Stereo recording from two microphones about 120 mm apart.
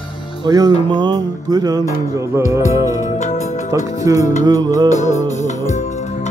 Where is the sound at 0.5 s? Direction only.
35° right (ahead or behind).